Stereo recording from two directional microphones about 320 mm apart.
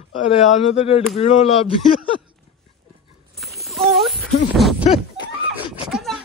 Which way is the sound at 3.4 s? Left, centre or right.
Centre.